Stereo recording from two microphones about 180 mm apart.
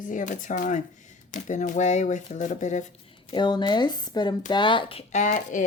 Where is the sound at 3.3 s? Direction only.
25° left (ahead or behind).